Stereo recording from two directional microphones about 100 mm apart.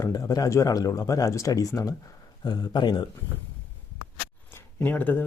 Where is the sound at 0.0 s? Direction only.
35° left (ahead or behind).